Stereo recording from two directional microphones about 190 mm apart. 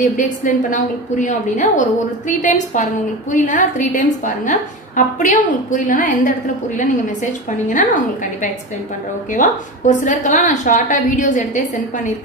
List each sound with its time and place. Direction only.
0.2 s a woman's voice: 40° left (ahead or behind)
7.6 s a woman's voice: 40° left (ahead or behind)